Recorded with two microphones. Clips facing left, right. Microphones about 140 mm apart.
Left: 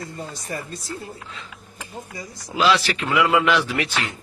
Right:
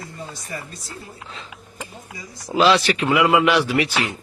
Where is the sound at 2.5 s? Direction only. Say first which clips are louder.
Right 3 dB; 25° right (ahead or behind); by 4.0 s 10° right (ahead or behind).